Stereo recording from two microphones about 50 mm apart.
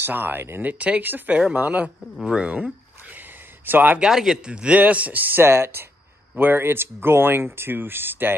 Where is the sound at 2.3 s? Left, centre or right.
Right.